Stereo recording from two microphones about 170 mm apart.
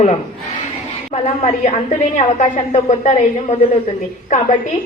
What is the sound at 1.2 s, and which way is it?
A woman's voice, 40° left (ahead or behind).